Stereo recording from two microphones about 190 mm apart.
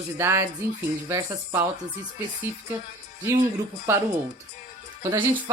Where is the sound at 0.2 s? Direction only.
15° right (ahead or behind).